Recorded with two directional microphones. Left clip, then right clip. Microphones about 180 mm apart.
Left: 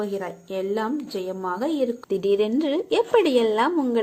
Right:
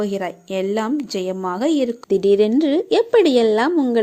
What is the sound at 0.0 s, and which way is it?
A woman's voice, 50° right (ahead or behind).